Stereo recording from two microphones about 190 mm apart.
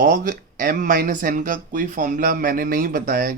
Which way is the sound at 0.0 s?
45° right (ahead or behind).